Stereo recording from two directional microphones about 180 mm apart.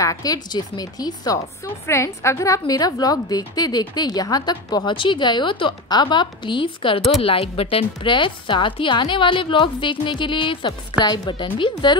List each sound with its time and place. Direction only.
0.0 s a woman's voice: 20° left (ahead or behind)